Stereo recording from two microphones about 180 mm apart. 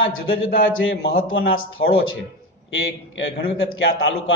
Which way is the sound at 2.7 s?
90° left.